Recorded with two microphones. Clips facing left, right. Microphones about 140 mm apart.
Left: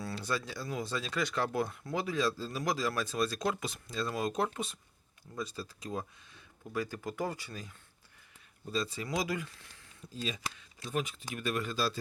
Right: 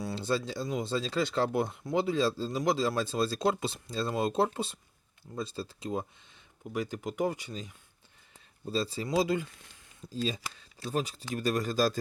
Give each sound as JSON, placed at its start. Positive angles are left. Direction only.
{"t": 0.0, "sound": "speech", "side_deg": -25}
{"t": 8.7, "sound": "speech", "side_deg": -30}